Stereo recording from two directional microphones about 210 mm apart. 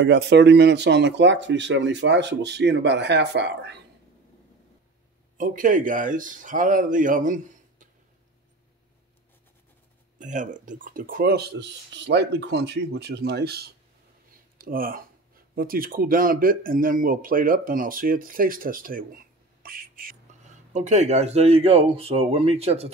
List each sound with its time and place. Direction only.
0.0 s speech: 55° right (ahead or behind)
5.4 s speech: 40° right (ahead or behind)
10.1 s speech: 35° right (ahead or behind)